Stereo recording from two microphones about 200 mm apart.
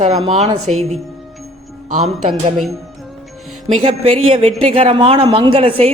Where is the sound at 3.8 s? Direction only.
30° right (ahead or behind).